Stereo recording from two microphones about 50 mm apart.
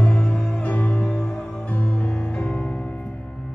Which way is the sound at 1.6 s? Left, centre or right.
Left.